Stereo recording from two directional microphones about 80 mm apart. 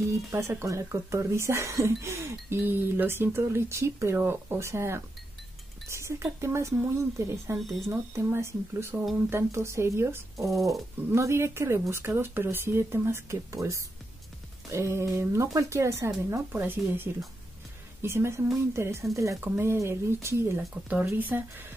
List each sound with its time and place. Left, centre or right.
0.3 s speech: right
7.5 s speech: centre
7.9 s speech: right
10.5 s speech: centre
11.1 s speech: right
20.9 s speech: right